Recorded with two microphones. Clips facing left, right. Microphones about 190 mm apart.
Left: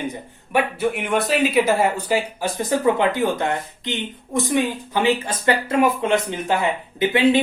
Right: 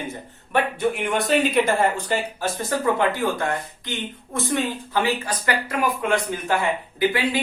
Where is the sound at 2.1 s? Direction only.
15° left (ahead or behind).